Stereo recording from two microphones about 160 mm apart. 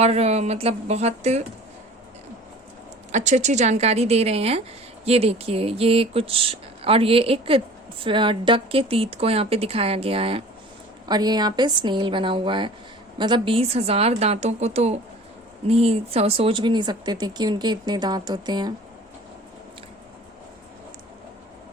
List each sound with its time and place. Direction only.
0.0 s speech: 40° right (ahead or behind)
3.1 s speech: 45° right (ahead or behind)
11.1 s speech: 25° right (ahead or behind)